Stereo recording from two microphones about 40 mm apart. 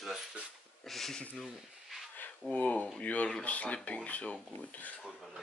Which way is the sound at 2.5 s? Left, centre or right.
Left.